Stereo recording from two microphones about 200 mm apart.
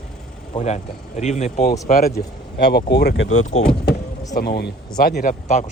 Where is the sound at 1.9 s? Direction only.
50° left (ahead or behind).